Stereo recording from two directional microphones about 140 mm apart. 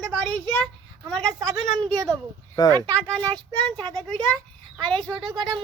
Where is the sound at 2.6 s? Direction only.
25° left (ahead or behind).